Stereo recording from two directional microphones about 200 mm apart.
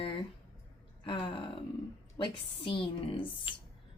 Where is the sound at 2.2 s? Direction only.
20° left (ahead or behind).